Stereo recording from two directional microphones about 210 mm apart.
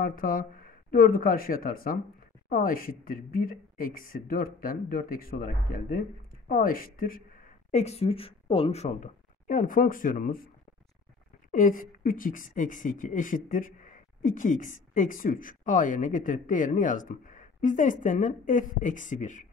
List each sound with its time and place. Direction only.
0.0 s speech: 40° left (ahead or behind)
7.7 s a woman's voice: 30° left (ahead or behind)
11.5 s a woman's voice: 40° left (ahead or behind)